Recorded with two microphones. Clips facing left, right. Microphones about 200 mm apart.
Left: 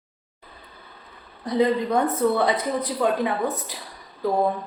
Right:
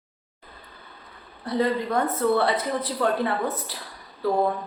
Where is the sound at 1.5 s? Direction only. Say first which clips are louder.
Left 3 dB; 15° left (ahead or behind).